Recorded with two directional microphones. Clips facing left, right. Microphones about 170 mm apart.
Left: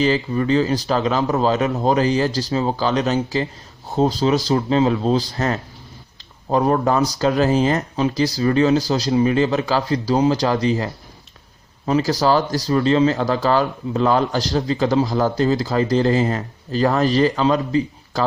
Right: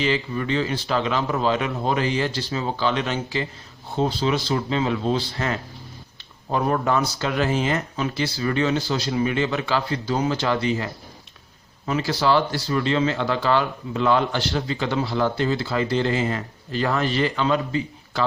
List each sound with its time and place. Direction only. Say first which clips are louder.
0.0 s speech: left 5 dB; 40° left (ahead or behind)